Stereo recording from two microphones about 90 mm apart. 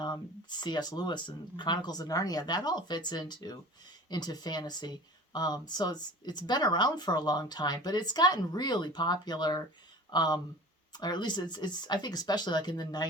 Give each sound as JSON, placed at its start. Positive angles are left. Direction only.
{"t": 0.0, "sound": "speech", "side_deg": 55}